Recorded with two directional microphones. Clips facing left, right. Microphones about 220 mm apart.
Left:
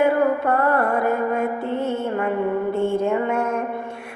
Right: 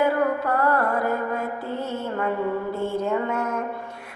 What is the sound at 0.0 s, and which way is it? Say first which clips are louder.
Music: left 4 dB; 25° left (ahead or behind).